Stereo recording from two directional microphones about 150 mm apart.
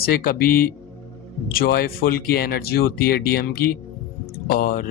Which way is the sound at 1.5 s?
90° left.